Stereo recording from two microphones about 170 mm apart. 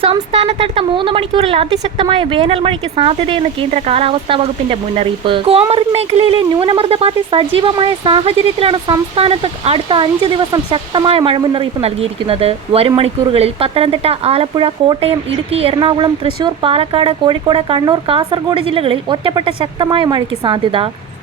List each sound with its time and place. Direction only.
0.0 s speech: 35° right (ahead or behind)